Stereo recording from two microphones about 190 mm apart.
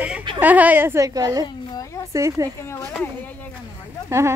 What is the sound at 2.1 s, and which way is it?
Speech, 15° right (ahead or behind).